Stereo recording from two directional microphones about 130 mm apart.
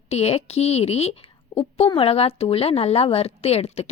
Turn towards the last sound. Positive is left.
turn(degrees=55)  # may be behind; listen again after turning